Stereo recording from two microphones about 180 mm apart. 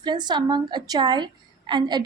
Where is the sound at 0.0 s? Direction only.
25° right (ahead or behind).